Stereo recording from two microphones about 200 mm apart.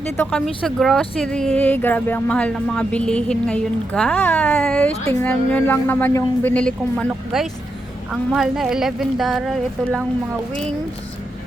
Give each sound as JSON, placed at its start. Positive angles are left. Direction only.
{"t": 0.2, "sound": "a woman's voice", "side_deg": 5}